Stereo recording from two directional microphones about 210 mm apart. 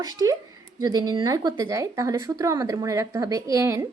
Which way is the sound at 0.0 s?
15° right (ahead or behind).